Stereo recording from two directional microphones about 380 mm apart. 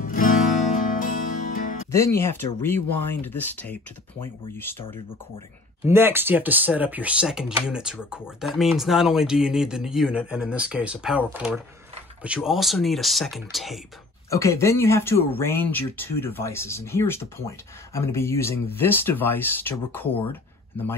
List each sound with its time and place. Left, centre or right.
0.0 s music: left
1.9 s speech: centre
5.9 s speech: centre